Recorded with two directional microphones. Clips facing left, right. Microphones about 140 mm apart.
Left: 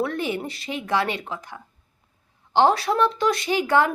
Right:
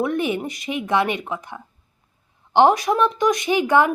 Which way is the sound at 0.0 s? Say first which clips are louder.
Right 4 dB; 20° right (ahead or behind).